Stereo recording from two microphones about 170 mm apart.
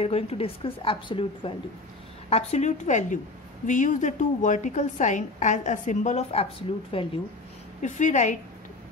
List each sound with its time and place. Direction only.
0.0 s a woman's voice: 35° left (ahead or behind)
7.8 s a woman's voice: 45° left (ahead or behind)